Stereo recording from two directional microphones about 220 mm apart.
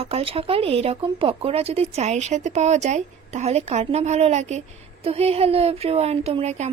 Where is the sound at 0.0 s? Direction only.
25° right (ahead or behind).